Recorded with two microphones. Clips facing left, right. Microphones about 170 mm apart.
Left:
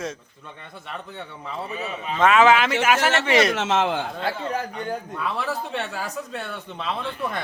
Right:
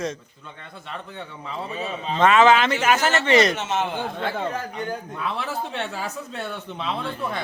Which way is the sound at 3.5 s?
90° left.